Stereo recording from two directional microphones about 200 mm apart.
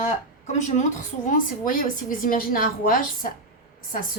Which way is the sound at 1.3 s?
40° left (ahead or behind).